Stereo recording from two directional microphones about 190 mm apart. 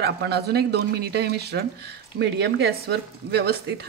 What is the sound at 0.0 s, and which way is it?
Speech, 60° right (ahead or behind).